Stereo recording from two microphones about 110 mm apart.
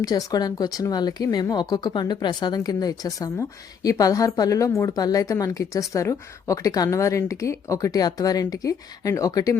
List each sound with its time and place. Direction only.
0.0 s a woman's voice: 35° left (ahead or behind)